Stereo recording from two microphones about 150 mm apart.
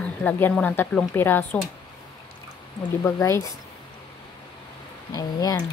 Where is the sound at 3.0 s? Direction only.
20° left (ahead or behind).